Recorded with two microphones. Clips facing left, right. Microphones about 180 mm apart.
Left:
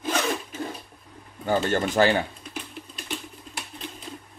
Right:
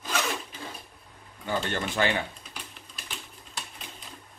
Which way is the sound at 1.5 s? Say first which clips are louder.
Left 7 dB; 45° left (ahead or behind).